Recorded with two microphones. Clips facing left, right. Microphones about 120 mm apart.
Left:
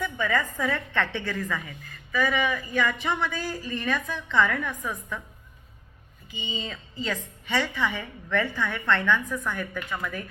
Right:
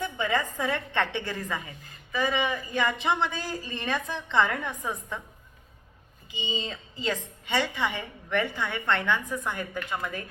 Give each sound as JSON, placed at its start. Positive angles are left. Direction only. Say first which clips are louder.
{"t": 0.0, "sound": "a woman's voice", "louder": "left 1 dB", "side_deg": -20}
{"t": 6.4, "sound": "a woman's voice", "louder": "right 2 dB", "side_deg": -25}